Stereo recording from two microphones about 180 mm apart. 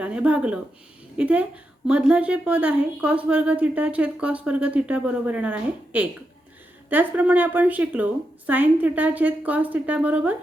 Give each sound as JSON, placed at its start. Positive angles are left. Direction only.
{"t": 0.0, "sound": "a woman's voice", "side_deg": -5}